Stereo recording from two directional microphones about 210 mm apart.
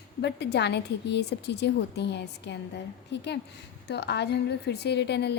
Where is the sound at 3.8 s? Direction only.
50° left (ahead or behind).